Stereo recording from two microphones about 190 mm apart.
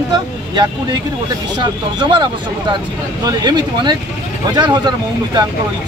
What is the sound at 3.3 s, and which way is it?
Speech, 20° right (ahead or behind).